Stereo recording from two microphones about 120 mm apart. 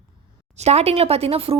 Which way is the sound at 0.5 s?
65° right (ahead or behind).